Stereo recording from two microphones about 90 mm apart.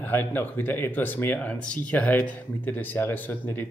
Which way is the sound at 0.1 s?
20° left (ahead or behind).